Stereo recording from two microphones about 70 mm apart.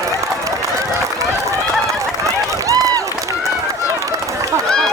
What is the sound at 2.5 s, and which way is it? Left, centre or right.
Run, right.